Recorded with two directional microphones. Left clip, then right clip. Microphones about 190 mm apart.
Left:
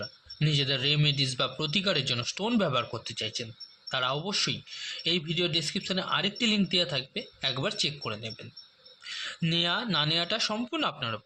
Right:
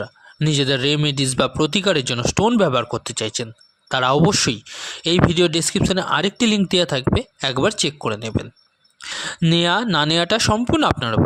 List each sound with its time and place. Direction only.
0.0 s speech: 60° right (ahead or behind)